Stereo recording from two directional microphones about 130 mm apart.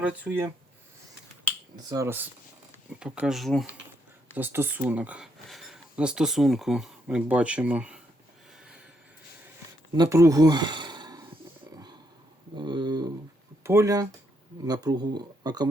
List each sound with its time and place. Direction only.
0.0 s speech: 10° right (ahead or behind)
1.7 s speech: 30° right (ahead or behind)
2.0 s speech: 15° right (ahead or behind); by 3.7 s centre (ahead or behind)
4.4 s speech: 15° right (ahead or behind)
10.1 s speech: 25° right (ahead or behind)
12.5 s a sound: 35° right (ahead or behind)
13.7 s speech: 20° right (ahead or behind)